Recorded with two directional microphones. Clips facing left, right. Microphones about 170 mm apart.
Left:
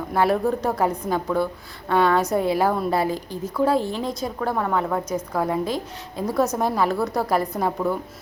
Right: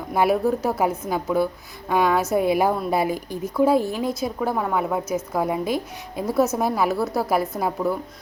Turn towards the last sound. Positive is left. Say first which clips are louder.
# even
turn(degrees=-5)  # may be behind; listen again after turning